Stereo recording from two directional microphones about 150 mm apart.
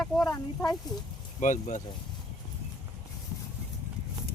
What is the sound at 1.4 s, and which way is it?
Speech, 55° left (ahead or behind).